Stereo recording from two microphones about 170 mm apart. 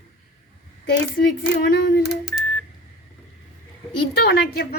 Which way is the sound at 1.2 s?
55° left (ahead or behind).